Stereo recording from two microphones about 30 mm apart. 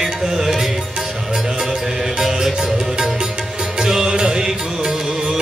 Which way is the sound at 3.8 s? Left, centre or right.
Right.